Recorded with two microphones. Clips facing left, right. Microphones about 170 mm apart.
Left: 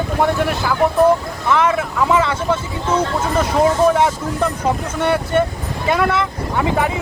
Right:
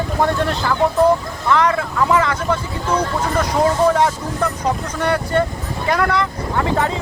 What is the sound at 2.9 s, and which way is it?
Speech, 5° left (ahead or behind).